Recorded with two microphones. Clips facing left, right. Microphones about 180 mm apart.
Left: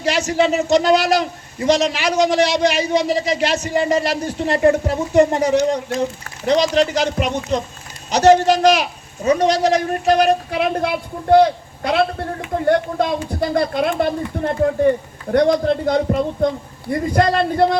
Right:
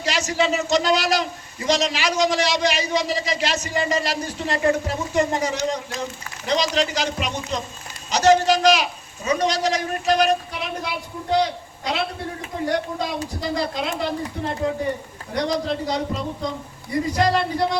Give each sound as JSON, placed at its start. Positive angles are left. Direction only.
{"t": 0.0, "sound": "a man's voice", "side_deg": 60}